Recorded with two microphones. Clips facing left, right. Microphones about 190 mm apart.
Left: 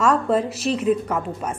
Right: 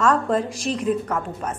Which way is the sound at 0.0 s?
10° left (ahead or behind).